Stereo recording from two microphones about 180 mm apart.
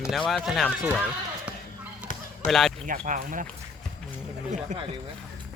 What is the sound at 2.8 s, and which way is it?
Speech, 45° right (ahead or behind).